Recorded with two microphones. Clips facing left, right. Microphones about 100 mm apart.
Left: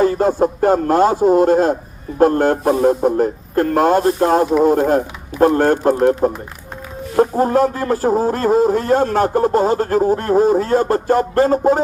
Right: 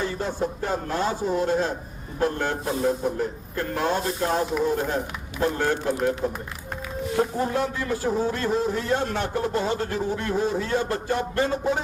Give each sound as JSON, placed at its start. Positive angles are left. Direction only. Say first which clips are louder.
{"t": 0.0, "sound": "speech", "louder": "left 12 dB", "side_deg": 45}